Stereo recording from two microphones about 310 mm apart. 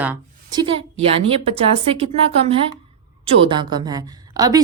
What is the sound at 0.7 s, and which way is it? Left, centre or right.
A woman's voice, centre.